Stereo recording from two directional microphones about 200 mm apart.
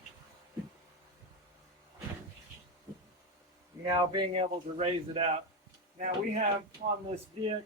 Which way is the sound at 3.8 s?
20° right (ahead or behind).